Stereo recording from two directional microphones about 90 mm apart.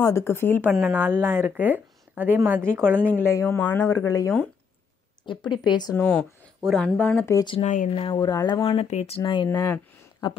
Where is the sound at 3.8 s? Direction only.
40° left (ahead or behind).